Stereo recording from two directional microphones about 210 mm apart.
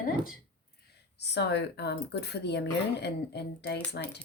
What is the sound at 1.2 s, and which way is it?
Speech, 55° left (ahead or behind).